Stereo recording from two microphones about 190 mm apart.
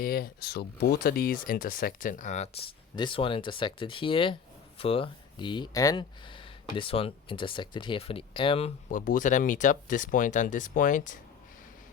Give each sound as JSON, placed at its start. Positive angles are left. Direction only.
{"t": 0.0, "sound": "speech", "side_deg": 50}
{"t": 2.9, "sound": "speech", "side_deg": 25}
{"t": 8.9, "sound": "speech", "side_deg": 45}